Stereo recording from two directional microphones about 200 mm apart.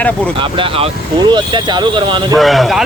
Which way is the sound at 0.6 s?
25° right (ahead or behind).